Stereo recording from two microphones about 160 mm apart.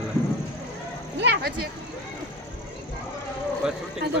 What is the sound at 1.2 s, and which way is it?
Speech, 85° right.